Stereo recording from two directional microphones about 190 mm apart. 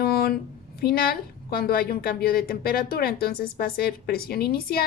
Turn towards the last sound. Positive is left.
turn(degrees=55)  # may be behind; listen again after turning